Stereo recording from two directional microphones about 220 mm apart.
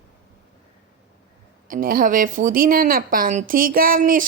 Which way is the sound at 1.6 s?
40° right (ahead or behind).